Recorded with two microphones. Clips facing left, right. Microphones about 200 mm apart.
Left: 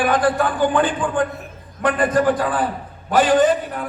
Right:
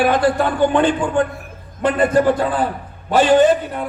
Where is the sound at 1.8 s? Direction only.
25° right (ahead or behind).